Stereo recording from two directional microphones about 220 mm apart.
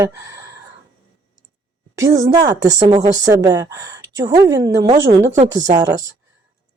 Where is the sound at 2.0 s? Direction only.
15° right (ahead or behind).